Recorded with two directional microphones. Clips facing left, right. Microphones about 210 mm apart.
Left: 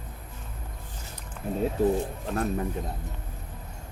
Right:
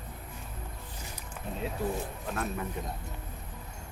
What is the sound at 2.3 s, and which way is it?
Speech, 35° left (ahead or behind).